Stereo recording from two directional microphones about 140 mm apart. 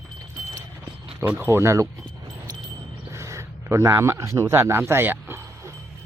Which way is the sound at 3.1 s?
20° right (ahead or behind).